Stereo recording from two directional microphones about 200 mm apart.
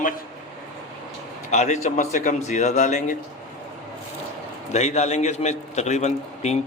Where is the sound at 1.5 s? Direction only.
35° left (ahead or behind).